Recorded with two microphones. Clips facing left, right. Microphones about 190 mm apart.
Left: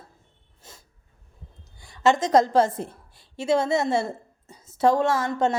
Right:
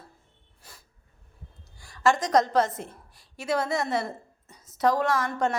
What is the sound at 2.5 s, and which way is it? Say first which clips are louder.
A woman's voice: left 4 dB; 30° left (ahead or behind).